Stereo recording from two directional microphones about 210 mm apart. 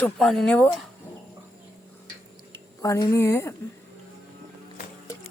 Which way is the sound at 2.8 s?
15° left (ahead or behind).